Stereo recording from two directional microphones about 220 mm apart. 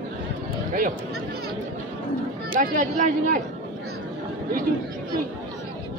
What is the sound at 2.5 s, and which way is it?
Speech, 35° right (ahead or behind).